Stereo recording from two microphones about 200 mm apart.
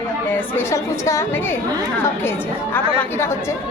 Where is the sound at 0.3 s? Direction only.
10° left (ahead or behind).